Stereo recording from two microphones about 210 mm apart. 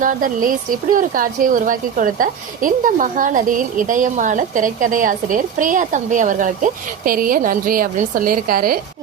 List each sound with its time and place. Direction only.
0.0 s a woman's voice: 40° right (ahead or behind)